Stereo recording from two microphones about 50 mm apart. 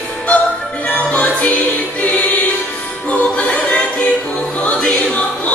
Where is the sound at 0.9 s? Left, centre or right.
Left.